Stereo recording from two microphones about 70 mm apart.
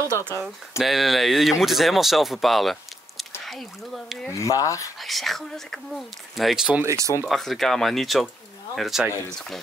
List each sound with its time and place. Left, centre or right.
0.7 s speech: centre
4.3 s speech: left
5.0 s speech: centre
6.8 s speech: right
7.2 s speech: centre